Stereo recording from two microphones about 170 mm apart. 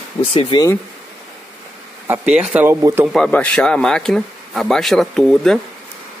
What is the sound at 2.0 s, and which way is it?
Speech, 5° right (ahead or behind).